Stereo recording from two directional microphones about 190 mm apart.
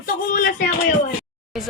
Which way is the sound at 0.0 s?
50° left (ahead or behind).